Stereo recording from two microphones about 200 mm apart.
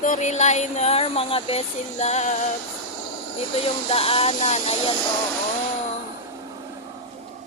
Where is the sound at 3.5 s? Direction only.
30° left (ahead or behind).